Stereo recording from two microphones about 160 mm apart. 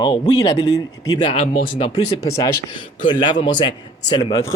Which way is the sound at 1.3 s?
45° left (ahead or behind).